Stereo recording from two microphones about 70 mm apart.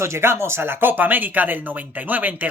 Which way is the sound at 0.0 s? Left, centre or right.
Right.